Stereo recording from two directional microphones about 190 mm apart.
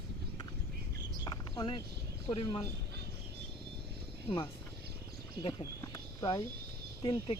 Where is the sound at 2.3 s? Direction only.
25° left (ahead or behind).